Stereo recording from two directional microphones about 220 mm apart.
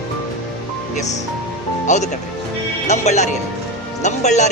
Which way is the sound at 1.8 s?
35° left (ahead or behind).